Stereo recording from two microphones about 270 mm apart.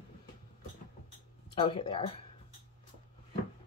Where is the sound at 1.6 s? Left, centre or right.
Centre.